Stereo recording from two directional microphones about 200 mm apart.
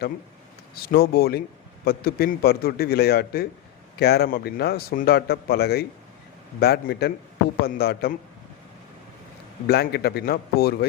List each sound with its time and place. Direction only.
0.8 s a man's voice: 50° left (ahead or behind)
9.6 s a man's voice: 55° left (ahead or behind)